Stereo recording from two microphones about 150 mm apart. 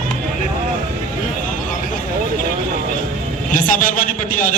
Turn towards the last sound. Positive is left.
turn(degrees=60)  # may be behind; listen again after turning